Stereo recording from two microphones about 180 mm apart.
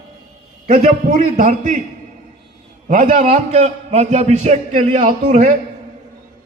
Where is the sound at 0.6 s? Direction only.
45° right (ahead or behind).